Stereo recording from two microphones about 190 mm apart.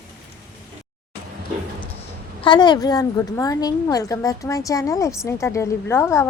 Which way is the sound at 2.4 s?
25° left (ahead or behind).